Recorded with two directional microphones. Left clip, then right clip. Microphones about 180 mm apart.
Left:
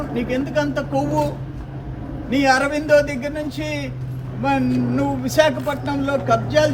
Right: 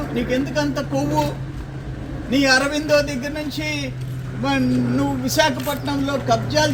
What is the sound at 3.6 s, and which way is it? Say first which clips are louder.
Speech: right 1 dB; 25° left (ahead or behind).